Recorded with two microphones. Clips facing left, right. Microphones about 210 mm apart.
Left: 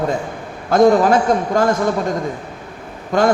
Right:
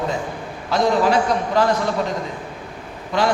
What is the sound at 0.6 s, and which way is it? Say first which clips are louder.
A woman's voice: left 6 dB; 50° left (ahead or behind).